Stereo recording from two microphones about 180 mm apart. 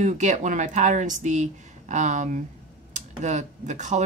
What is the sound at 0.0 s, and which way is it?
Speech, 40° right (ahead or behind).